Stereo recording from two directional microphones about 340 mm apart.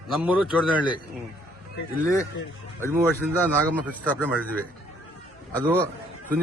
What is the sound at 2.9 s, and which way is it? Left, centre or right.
Speech, centre.